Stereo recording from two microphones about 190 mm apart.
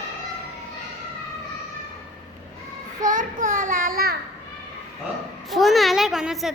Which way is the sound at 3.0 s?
45° right (ahead or behind).